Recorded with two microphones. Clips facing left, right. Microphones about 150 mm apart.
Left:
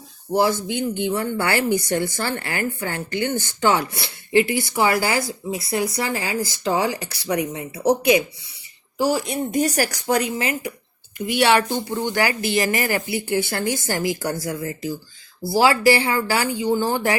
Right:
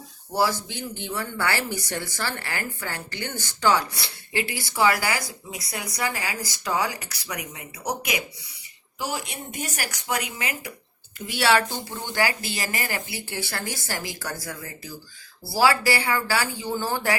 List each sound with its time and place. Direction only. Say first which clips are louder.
0.3 s speech: left 5 dB; 20° left (ahead or behind)
11.3 s speech: left 4 dB; 20° left (ahead or behind)
12.7 s speech: left 8 dB; 30° right (ahead or behind)
13.1 s speech: left 10 dB; 25° left (ahead or behind)